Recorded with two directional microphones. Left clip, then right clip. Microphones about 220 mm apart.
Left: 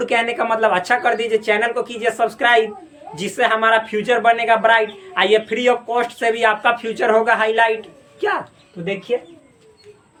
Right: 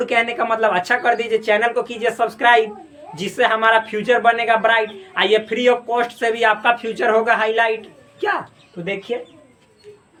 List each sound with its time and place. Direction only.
0.0 s a man's voice: 15° left (ahead or behind)